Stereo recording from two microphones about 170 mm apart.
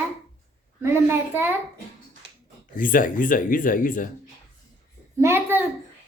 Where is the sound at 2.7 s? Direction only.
55° left (ahead or behind).